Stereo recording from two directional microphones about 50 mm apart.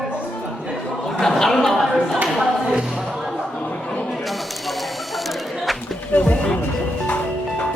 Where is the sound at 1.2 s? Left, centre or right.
Centre.